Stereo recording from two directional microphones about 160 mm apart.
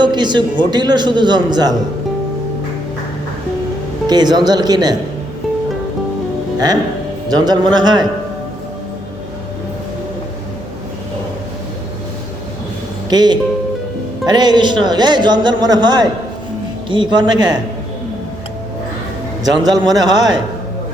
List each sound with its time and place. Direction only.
0.0 s a man's voice: 30° right (ahead or behind)
4.0 s a man's voice: 25° right (ahead or behind)
7.3 s a man's voice: 25° right (ahead or behind)
13.1 s a man's voice: 25° right (ahead or behind)
19.7 s a man's voice: 25° right (ahead or behind)